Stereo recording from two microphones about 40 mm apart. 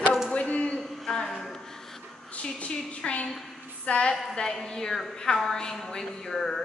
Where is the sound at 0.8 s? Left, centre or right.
Centre.